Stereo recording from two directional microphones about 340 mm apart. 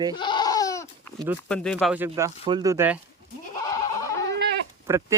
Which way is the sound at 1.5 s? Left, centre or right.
Centre.